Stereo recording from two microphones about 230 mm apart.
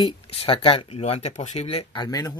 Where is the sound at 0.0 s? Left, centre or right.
Left.